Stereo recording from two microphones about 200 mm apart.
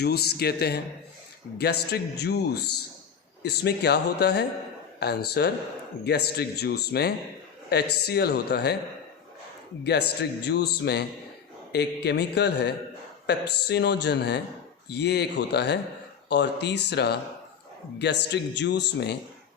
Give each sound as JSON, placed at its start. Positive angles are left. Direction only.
{"t": 0.0, "sound": "a man's voice", "side_deg": 55}
{"t": 1.9, "sound": "a man's voice", "side_deg": 55}
{"t": 9.8, "sound": "speech", "side_deg": 55}